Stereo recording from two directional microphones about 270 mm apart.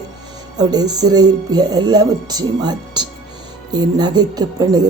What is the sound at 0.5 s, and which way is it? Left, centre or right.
Speech, centre.